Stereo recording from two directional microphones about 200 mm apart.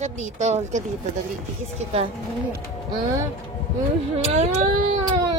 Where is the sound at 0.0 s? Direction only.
35° right (ahead or behind).